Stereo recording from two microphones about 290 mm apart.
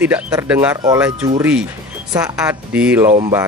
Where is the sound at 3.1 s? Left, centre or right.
Right.